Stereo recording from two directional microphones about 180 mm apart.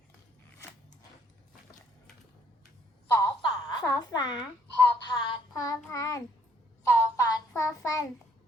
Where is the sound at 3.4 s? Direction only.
25° left (ahead or behind).